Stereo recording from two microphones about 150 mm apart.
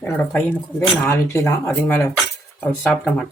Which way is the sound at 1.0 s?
15° left (ahead or behind).